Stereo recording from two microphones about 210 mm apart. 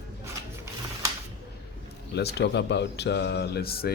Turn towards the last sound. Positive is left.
turn(degrees=45)  # may be behind; listen again after turning